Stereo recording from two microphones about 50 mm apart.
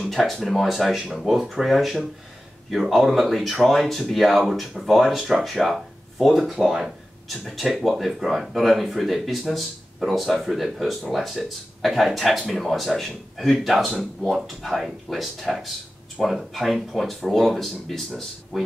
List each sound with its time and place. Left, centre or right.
0.1 s speech: centre
6.6 s a sound: centre
7.4 s speech: centre